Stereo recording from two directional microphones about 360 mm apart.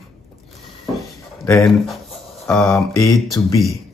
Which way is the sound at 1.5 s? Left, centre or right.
Centre.